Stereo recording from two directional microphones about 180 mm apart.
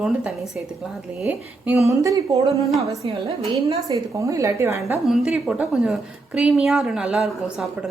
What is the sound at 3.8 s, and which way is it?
A woman's voice, 15° right (ahead or behind).